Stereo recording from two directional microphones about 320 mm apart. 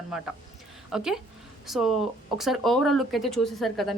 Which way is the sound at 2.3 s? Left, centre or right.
Centre.